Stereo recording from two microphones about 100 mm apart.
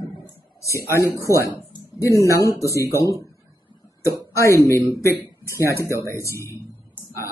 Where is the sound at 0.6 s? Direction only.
30° left (ahead or behind).